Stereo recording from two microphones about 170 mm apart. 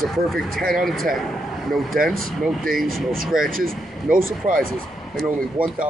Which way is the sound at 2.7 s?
55° right (ahead or behind).